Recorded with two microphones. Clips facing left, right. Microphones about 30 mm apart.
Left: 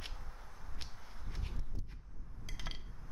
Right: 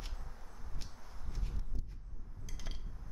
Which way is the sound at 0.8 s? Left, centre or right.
Centre.